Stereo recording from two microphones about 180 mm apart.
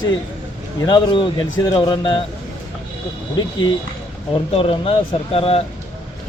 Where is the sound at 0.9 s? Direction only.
25° left (ahead or behind).